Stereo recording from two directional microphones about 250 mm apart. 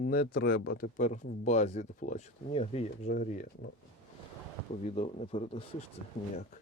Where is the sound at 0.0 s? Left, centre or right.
Left.